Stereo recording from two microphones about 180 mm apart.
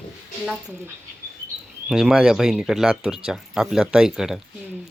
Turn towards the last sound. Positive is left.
turn(degrees=-5)  # may be behind; listen again after turning